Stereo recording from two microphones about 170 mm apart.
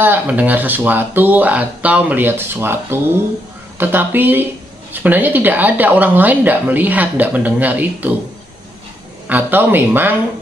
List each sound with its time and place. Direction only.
0.0 s speech: 10° right (ahead or behind)
9.3 s speech: 10° right (ahead or behind)